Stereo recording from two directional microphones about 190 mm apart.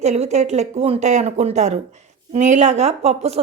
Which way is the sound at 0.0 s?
35° right (ahead or behind).